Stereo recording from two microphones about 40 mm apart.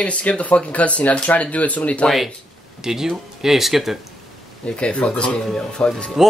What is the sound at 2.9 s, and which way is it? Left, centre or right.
Speech, centre.